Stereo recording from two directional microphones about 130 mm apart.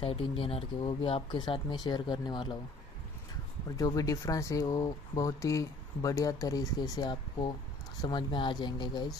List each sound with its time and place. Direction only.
0.0 s speech: 45° left (ahead or behind)
3.7 s speech: 30° left (ahead or behind)